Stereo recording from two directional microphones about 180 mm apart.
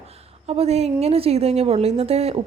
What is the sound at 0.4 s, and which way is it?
Speech, 35° right (ahead or behind).